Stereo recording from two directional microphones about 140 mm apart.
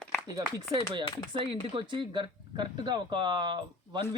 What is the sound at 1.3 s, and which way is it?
Speech, 40° right (ahead or behind).